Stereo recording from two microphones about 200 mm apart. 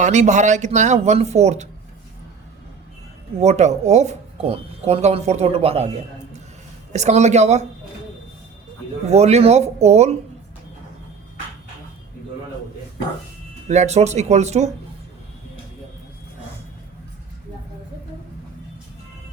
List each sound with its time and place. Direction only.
0.0 s speech: 35° right (ahead or behind)
3.4 s speech: 35° right (ahead or behind)
6.9 s speech: 35° right (ahead or behind)
9.0 s speech: 35° right (ahead or behind)
13.7 s speech: 35° right (ahead or behind)